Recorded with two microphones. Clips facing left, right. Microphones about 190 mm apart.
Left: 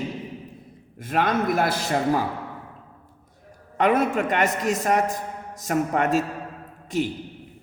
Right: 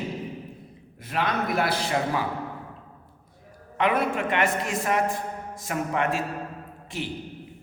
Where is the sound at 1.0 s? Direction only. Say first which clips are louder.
Left 5 dB; 50° left (ahead or behind).